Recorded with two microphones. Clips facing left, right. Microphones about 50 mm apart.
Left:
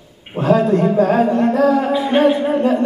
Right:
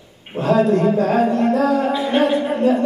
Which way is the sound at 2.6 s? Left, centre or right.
Left.